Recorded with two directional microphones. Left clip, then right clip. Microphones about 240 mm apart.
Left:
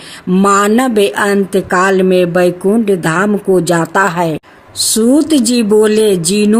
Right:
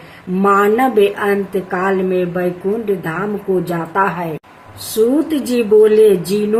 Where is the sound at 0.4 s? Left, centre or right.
Left.